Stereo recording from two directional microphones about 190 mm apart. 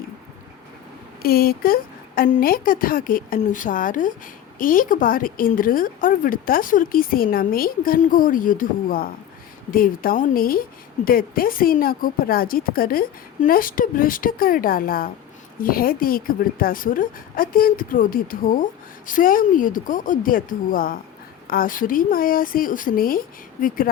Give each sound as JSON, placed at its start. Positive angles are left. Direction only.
{"t": 1.2, "sound": "a woman's voice", "side_deg": 50}